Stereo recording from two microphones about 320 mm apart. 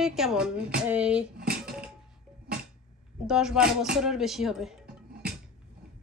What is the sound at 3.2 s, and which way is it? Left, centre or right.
Speech, centre.